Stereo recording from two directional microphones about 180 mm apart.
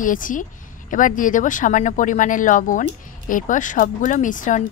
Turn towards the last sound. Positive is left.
turn(degrees=45)  # may be behind; listen again after turning